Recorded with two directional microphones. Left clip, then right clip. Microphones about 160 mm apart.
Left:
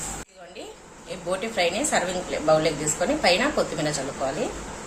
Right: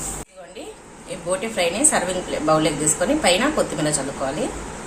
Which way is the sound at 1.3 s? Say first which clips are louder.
Right 2 dB; 20° left (ahead or behind).